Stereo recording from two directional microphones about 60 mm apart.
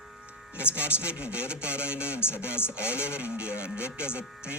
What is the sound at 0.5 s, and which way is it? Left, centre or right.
Speech, right.